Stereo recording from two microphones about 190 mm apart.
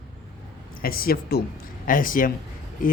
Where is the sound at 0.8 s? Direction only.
50° left (ahead or behind).